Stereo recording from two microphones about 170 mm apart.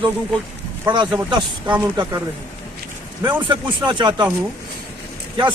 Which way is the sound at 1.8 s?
20° right (ahead or behind).